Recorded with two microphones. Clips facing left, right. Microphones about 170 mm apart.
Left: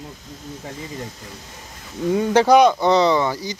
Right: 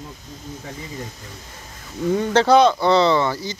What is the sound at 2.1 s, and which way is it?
Speech, 15° left (ahead or behind).